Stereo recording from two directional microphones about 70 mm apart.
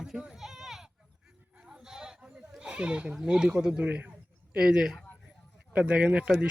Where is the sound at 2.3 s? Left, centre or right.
Centre.